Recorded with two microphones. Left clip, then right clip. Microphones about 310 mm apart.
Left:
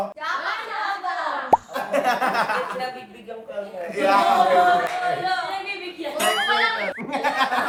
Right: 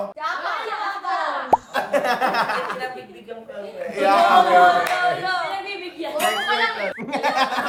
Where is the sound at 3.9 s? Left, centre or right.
Centre.